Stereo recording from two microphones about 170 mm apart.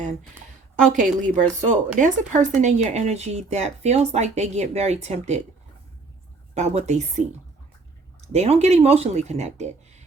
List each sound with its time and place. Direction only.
0.9 s speech: 45° right (ahead or behind)
6.5 s speech: 40° right (ahead or behind)
8.3 s speech: 40° right (ahead or behind)